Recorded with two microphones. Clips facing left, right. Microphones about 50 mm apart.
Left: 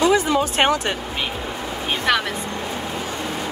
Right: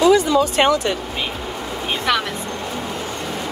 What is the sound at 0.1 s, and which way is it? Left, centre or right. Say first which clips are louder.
Speech: right 3 dB; left.